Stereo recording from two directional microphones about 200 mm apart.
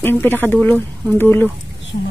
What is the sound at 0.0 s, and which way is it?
Speech, 10° left (ahead or behind).